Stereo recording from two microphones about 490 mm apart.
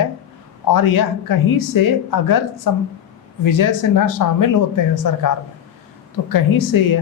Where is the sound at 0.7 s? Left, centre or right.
Left.